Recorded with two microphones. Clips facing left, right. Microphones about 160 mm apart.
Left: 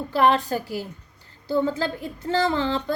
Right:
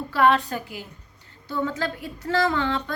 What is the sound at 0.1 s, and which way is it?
A woman's voice, 30° left (ahead or behind).